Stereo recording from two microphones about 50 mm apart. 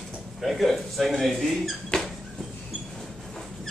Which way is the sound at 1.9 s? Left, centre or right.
Centre.